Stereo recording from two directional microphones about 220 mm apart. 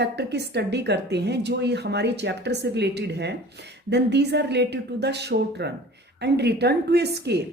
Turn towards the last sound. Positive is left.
turn(degrees=-50)  # may be behind; listen again after turning